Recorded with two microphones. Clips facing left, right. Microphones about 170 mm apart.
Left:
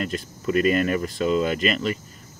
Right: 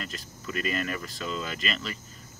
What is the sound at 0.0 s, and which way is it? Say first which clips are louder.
Speech: left 11 dB; 40° left (ahead or behind).